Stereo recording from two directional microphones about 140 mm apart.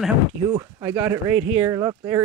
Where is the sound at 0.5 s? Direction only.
20° right (ahead or behind).